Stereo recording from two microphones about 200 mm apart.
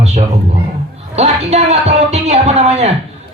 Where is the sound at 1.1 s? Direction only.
30° right (ahead or behind).